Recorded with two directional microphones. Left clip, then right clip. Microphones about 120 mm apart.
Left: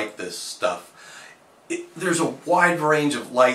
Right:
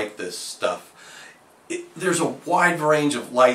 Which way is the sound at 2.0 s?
10° right (ahead or behind).